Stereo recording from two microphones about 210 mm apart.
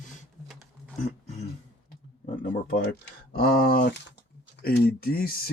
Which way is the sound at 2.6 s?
45° left (ahead or behind).